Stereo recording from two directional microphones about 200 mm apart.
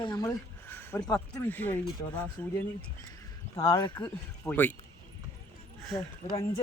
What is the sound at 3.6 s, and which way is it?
Speech, 20° left (ahead or behind).